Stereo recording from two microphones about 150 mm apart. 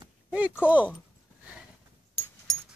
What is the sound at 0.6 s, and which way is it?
Speech, 10° right (ahead or behind).